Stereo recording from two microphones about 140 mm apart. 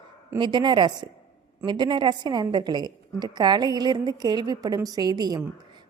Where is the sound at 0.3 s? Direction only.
30° right (ahead or behind).